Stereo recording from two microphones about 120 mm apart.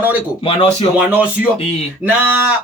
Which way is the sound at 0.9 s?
10° right (ahead or behind).